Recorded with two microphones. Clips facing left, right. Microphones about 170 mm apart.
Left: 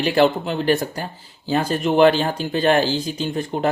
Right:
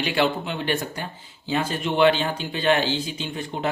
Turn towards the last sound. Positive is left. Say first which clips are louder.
# left 6 dB
turn(degrees=45)  # may be behind; listen again after turning